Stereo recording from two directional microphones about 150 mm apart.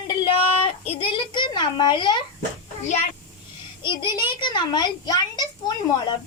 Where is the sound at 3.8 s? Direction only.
30° left (ahead or behind).